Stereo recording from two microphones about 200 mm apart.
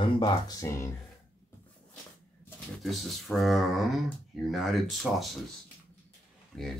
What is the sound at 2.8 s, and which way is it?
Speech, centre (ahead or behind).